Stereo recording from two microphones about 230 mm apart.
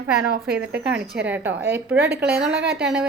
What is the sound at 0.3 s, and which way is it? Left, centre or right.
Speech, right.